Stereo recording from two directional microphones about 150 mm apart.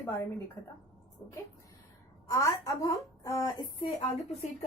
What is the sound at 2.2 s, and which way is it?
A woman's voice, 20° left (ahead or behind).